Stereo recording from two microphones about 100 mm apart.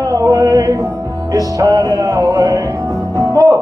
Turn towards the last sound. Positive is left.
turn(degrees=-35)  # may be behind; listen again after turning